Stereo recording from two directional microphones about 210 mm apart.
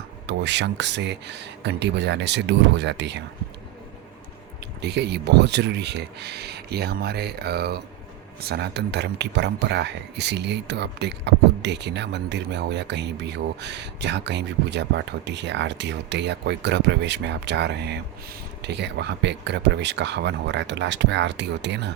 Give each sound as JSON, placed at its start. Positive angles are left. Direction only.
{"t": 0.3, "sound": "speech", "side_deg": -55}
{"t": 4.8, "sound": "speech", "side_deg": -55}